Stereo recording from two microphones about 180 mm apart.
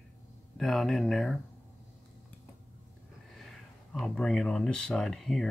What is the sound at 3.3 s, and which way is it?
Speech, centre (ahead or behind).